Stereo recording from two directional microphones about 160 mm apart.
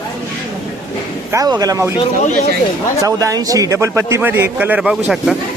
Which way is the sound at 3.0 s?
20° right (ahead or behind).